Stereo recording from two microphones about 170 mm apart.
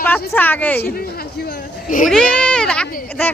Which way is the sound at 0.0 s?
10° left (ahead or behind).